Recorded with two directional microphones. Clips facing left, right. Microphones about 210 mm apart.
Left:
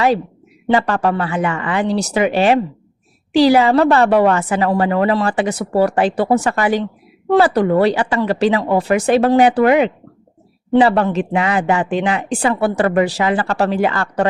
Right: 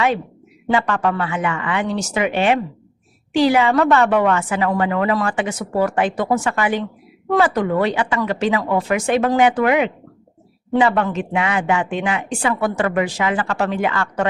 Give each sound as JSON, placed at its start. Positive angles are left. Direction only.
{"t": 0.7, "sound": "speech", "side_deg": 35}